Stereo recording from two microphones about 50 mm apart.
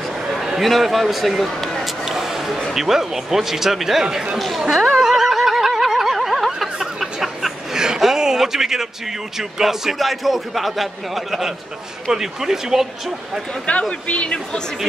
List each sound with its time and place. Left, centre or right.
0.6 s a sound: centre
2.7 s speech: centre
4.4 s a man's voice: centre
5.0 s a sound: centre
9.4 s a man's voice: centre
13.7 s speech: left